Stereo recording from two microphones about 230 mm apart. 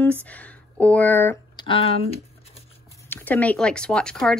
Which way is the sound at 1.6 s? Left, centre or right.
Left.